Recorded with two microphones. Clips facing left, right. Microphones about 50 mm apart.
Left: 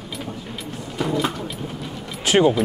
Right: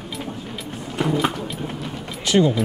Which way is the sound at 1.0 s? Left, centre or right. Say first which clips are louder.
Right 2 dB; right.